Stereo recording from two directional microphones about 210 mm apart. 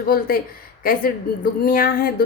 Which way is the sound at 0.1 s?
45° left (ahead or behind).